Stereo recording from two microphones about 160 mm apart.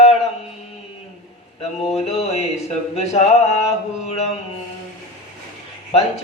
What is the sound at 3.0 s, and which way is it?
Mantra, 40° left (ahead or behind).